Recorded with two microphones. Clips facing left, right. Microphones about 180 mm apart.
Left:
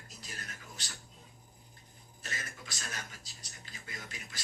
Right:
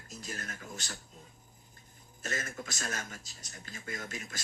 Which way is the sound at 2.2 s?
50° right (ahead or behind).